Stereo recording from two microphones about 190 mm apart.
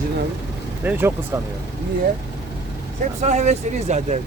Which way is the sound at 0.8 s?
10° right (ahead or behind).